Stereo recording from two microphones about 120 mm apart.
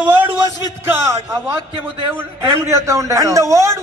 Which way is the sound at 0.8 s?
20° right (ahead or behind).